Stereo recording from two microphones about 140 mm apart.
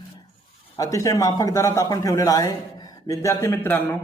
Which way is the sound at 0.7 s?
25° left (ahead or behind).